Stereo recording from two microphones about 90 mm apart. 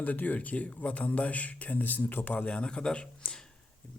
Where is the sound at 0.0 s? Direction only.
15° left (ahead or behind).